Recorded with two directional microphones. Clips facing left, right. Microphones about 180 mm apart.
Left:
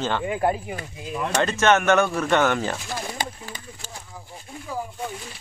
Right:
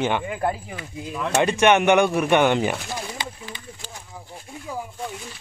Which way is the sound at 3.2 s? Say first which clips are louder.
Left 2 dB; 45° left (ahead or behind).